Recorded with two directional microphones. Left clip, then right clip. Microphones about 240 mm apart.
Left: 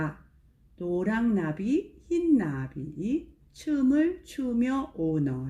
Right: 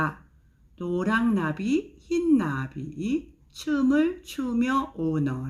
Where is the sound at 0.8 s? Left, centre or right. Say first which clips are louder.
Right 1 dB; centre.